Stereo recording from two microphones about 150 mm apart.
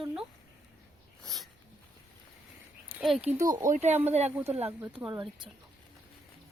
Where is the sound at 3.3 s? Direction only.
20° right (ahead or behind).